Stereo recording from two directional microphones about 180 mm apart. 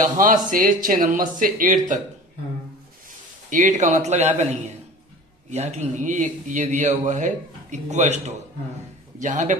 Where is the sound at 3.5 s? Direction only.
45° right (ahead or behind).